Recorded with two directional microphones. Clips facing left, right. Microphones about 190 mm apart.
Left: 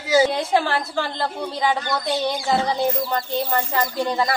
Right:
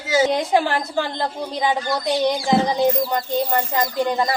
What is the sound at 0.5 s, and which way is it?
A woman's voice, 15° right (ahead or behind).